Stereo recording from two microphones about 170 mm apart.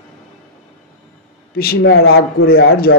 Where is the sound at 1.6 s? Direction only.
65° left (ahead or behind).